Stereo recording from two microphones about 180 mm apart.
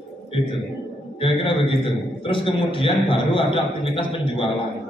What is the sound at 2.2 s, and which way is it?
A man's voice, 30° left (ahead or behind).